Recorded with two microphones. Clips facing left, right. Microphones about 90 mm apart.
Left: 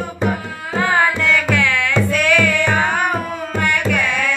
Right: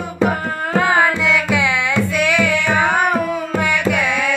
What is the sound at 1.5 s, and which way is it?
Music, 15° right (ahead or behind).